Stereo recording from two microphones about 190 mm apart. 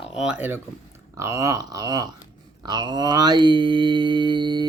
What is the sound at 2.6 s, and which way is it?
Mantra, 20° right (ahead or behind).